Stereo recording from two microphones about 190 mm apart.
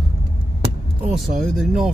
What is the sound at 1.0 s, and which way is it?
Speech, centre (ahead or behind).